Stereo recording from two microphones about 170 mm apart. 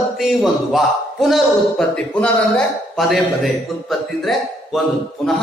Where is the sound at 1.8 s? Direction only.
5° left (ahead or behind).